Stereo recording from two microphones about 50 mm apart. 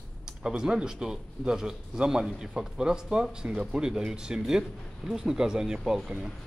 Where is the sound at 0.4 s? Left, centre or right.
Centre.